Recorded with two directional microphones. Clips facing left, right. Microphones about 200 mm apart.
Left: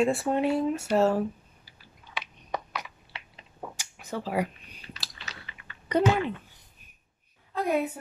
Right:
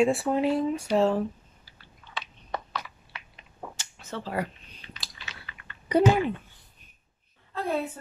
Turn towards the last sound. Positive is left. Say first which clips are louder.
# left 2 dB
turn(degrees=10)  # may be behind; listen again after turning